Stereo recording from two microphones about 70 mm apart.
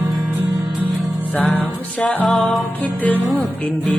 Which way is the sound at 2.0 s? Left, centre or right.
Centre.